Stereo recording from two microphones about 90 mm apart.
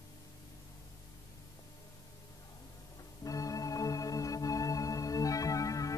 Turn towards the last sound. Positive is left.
turn(degrees=40)  # may be behind; listen again after turning